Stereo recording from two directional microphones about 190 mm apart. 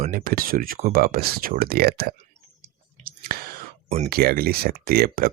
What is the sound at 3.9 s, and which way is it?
Speech, 35° right (ahead or behind).